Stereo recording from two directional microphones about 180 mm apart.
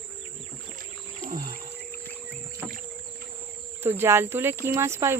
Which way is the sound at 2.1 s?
10° left (ahead or behind).